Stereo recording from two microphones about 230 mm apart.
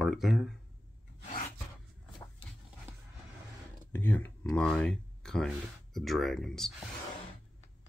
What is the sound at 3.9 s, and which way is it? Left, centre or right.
Speech, centre.